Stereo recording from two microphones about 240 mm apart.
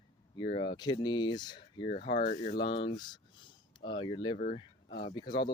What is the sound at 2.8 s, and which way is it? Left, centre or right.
Speech, centre.